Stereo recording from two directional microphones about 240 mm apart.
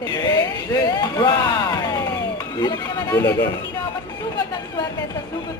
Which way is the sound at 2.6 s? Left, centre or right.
Centre.